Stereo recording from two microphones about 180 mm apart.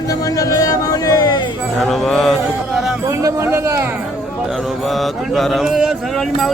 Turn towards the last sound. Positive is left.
turn(degrees=0)  # may be behind; listen again after turning